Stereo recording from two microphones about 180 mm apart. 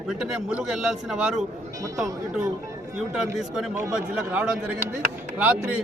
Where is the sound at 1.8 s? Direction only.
15° right (ahead or behind).